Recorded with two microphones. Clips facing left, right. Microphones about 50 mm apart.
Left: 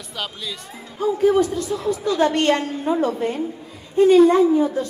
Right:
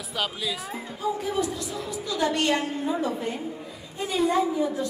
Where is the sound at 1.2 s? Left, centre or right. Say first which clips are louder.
Left 10 dB; left.